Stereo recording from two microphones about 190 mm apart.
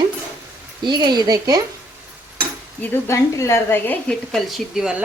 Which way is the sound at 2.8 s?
15° left (ahead or behind).